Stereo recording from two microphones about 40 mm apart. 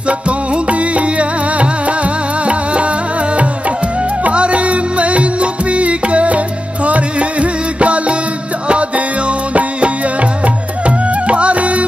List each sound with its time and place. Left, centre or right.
0.5 s music: right
4.2 s music: right